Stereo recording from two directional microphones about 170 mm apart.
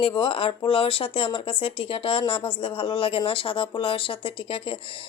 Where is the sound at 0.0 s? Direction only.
30° left (ahead or behind).